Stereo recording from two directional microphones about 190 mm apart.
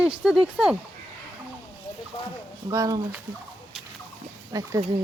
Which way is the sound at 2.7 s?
15° right (ahead or behind).